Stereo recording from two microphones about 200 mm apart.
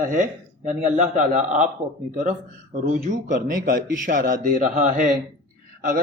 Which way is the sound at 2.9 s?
40° right (ahead or behind).